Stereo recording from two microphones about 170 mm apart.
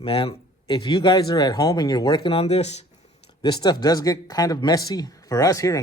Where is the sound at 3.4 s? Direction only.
25° left (ahead or behind).